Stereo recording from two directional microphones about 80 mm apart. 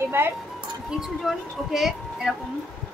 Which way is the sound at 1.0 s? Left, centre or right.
Centre.